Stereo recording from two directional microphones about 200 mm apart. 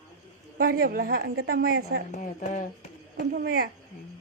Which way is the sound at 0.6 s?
45° right (ahead or behind).